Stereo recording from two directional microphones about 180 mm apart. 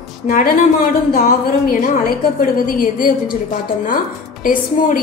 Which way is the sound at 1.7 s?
55° left (ahead or behind).